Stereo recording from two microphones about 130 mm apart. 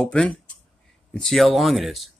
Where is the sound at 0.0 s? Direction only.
10° left (ahead or behind).